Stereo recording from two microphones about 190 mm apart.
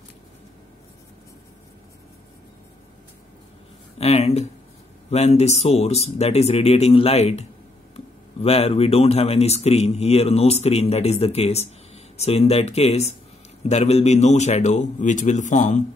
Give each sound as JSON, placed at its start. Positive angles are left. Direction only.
{"t": 4.0, "sound": "speech", "side_deg": 35}